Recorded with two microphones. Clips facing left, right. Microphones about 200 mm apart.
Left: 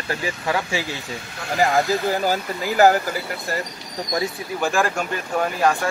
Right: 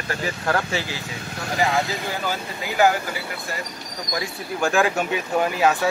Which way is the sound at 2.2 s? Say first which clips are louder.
Left 5 dB; 40° left (ahead or behind).